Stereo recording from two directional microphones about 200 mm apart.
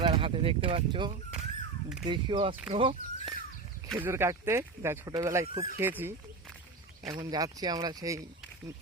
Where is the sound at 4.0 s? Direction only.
15° right (ahead or behind).